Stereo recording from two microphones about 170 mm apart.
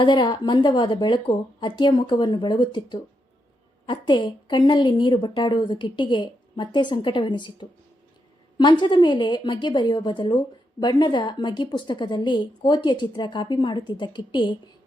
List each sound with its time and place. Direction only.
0.0 s a woman's voice: 25° left (ahead or behind)